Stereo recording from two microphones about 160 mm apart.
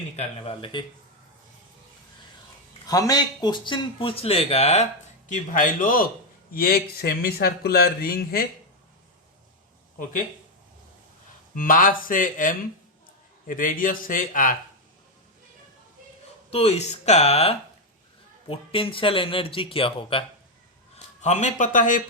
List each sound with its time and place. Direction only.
0.2 s speech: 35° left (ahead or behind)
2.8 s speech: 25° left (ahead or behind); by 4.9 s 40° left (ahead or behind)
5.3 s a man's voice: 55° left (ahead or behind)
11.5 s speech: 60° left (ahead or behind)
16.5 s speech: 40° left (ahead or behind)
20.9 s a man's voice: 45° left (ahead or behind)